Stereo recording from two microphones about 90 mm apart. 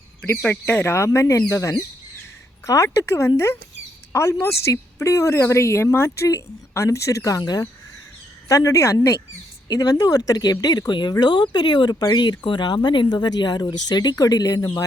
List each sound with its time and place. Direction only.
0.6 s speech: 25° left (ahead or behind); by 14.7 s 40° left (ahead or behind)